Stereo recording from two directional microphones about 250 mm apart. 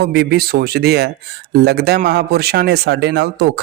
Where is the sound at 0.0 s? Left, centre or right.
Right.